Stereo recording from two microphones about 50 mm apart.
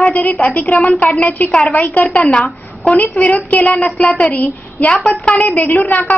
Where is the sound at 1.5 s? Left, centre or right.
Centre.